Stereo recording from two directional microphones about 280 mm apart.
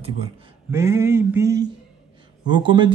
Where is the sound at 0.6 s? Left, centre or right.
Centre.